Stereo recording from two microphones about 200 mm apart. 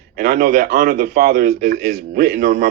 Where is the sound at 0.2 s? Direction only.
45° right (ahead or behind).